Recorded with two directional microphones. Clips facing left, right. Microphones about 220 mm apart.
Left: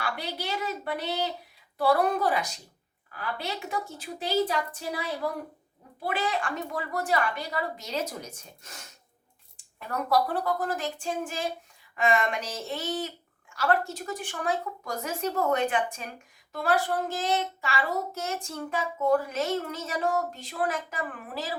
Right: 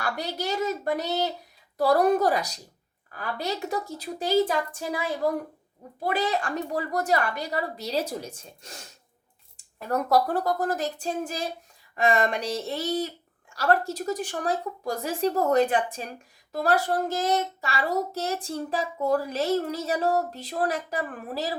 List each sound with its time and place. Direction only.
0.0 s a woman's voice: 45° right (ahead or behind)
6.1 s speech: 40° right (ahead or behind)
9.7 s speech: 40° right (ahead or behind)